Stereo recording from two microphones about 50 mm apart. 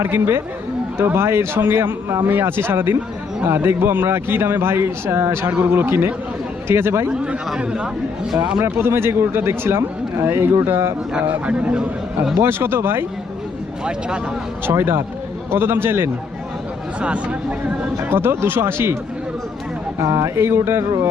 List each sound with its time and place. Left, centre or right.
0.0 s speech: right
7.1 s speech: centre
8.6 s speech: right
11.2 s a man's voice: right
11.5 s speech: centre
12.4 s speech: right
14.7 s speech: right
17.0 s speech: right
18.1 s speech: right
20.0 s speech: right